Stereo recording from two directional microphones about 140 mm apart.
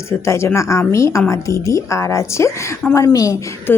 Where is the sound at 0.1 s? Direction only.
20° left (ahead or behind).